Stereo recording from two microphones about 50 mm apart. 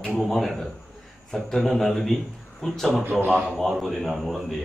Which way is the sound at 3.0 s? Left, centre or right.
Right.